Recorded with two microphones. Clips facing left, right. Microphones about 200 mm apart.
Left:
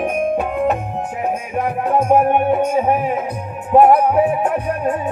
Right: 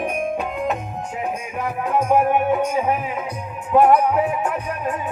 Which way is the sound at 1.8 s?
40° left (ahead or behind).